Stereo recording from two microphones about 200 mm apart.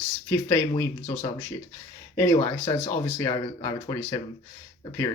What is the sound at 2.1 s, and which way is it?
Speech, 20° left (ahead or behind).